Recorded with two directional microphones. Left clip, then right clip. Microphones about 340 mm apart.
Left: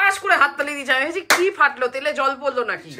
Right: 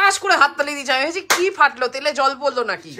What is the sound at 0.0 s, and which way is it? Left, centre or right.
Speech, centre.